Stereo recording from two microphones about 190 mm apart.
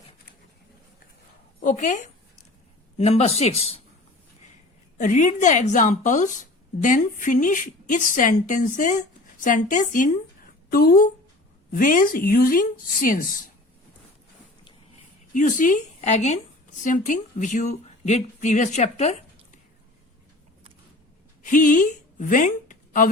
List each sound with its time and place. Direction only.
1.6 s a woman's voice: 45° left (ahead or behind)
4.9 s a woman's voice: 45° left (ahead or behind)
15.3 s speech: 45° left (ahead or behind)
21.4 s speech: 40° left (ahead or behind)